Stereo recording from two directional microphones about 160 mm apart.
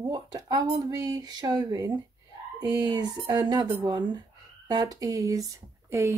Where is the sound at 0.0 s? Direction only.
25° right (ahead or behind).